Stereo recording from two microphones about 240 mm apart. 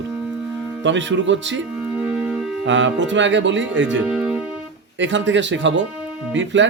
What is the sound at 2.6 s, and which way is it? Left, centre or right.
Speech, right.